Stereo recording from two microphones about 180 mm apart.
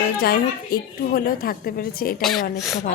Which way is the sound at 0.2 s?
60° left (ahead or behind).